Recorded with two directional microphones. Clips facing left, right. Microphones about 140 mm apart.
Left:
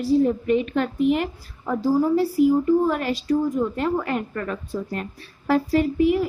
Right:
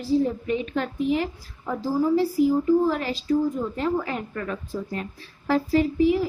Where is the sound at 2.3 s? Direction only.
55° left (ahead or behind).